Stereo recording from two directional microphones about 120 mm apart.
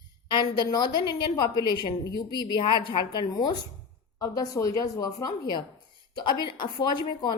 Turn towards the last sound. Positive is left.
turn(degrees=40)  # may be behind; listen again after turning